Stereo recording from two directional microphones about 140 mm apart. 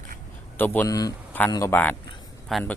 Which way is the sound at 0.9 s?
25° left (ahead or behind).